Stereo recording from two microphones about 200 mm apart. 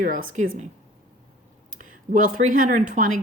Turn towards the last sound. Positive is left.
turn(degrees=-40)  # may be behind; listen again after turning